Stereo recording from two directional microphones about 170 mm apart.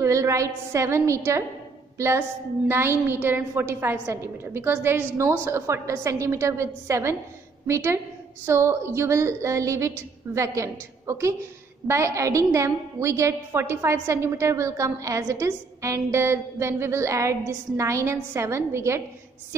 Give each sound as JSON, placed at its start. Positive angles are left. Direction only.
{"t": 0.0, "sound": "a woman's voice", "side_deg": -15}